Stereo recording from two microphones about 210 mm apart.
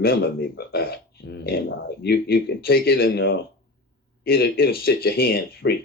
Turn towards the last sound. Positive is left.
turn(degrees=45)  # may be behind; listen again after turning